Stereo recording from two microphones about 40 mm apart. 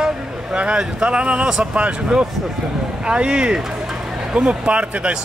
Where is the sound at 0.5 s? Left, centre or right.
Right.